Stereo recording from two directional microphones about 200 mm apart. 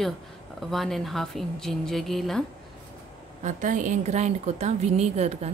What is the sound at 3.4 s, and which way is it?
A woman's voice, 40° right (ahead or behind).